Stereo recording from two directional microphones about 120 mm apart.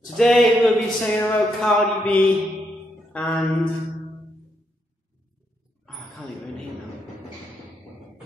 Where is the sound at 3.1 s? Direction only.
5° left (ahead or behind).